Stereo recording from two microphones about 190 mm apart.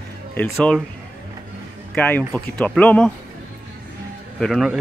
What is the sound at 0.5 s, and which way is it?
Speech, 5° left (ahead or behind).